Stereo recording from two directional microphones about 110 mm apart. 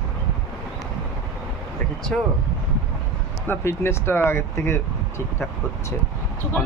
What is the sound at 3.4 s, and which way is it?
Speech, 20° left (ahead or behind).